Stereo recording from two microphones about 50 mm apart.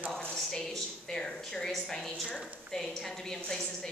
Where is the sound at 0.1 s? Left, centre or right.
Centre.